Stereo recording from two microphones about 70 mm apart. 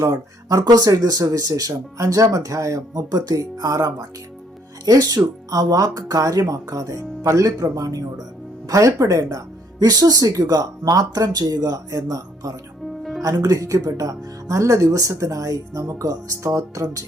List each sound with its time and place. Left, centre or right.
0.0 s speech: right
0.6 s speech: right
3.3 s speech: right
13.0 s music: centre
13.2 s speech: right